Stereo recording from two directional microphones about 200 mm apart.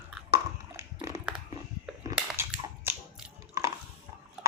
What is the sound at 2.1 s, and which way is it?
Cap gun, 10° right (ahead or behind).